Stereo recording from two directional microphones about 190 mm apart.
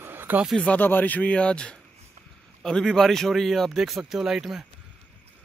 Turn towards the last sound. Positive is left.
turn(degrees=-5)  # may be behind; listen again after turning